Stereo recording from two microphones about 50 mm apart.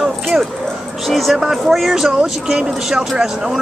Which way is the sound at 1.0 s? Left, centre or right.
Centre.